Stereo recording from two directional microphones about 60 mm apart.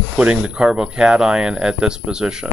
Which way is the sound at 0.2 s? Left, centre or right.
Centre.